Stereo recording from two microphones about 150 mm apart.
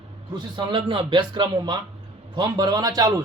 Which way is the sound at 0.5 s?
30° right (ahead or behind).